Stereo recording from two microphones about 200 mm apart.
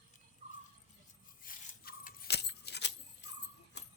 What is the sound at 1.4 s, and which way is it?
Keys jangling, 45° left (ahead or behind).